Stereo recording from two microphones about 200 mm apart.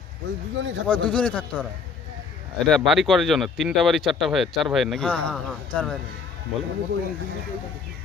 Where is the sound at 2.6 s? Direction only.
Centre (ahead or behind).